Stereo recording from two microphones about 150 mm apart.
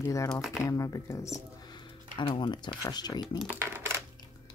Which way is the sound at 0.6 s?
20° left (ahead or behind).